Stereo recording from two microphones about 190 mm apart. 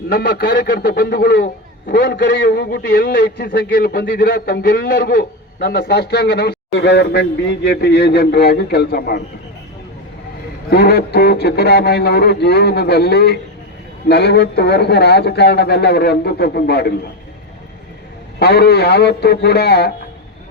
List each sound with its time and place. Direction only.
0.1 s a man's voice: 50° left (ahead or behind)
10.7 s a man's voice: 60° left (ahead or behind)
18.3 s a man's voice: 60° left (ahead or behind)